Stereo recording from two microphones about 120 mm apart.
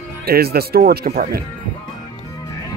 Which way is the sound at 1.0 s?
90° right.